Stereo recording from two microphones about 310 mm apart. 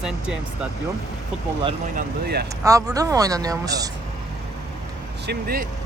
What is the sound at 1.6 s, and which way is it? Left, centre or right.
Speech, centre.